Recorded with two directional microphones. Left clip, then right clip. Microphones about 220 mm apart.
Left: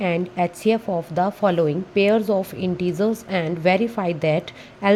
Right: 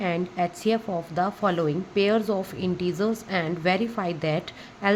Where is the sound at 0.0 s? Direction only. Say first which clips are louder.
Left 4 dB; 20° left (ahead or behind).